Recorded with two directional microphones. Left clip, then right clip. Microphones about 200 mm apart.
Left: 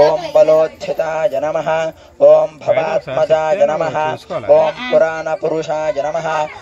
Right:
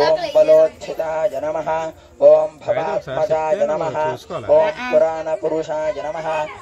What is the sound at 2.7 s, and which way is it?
A man's voice, 80° left.